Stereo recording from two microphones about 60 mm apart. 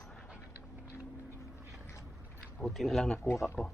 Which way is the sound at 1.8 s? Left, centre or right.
Left.